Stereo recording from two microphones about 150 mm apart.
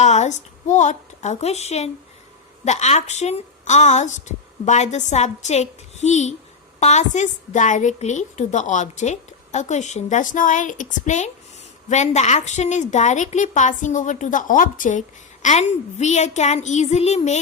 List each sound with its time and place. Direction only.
0.0 s a woman's voice: 50° left (ahead or behind)